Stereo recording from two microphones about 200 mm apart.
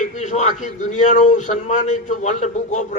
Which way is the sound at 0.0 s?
35° left (ahead or behind).